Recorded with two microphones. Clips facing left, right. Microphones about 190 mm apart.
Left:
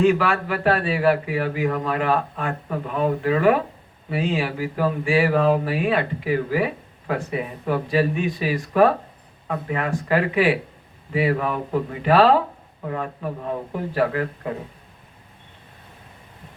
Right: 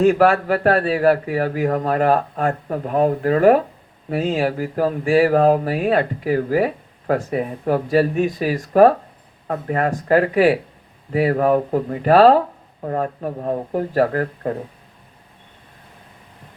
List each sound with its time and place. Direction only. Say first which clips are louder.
0.0 s a man's voice: right 4 dB; 45° right (ahead or behind)